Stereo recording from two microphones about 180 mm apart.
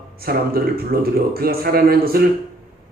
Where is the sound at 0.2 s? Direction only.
55° right (ahead or behind).